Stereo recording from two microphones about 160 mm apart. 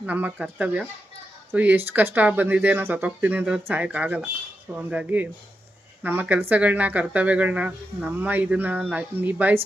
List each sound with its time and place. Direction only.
0.0 s speech: 10° right (ahead or behind)